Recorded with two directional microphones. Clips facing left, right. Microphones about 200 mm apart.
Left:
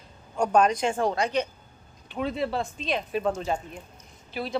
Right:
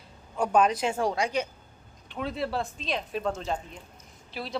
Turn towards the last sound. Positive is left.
turn(degrees=0)  # may be behind; listen again after turning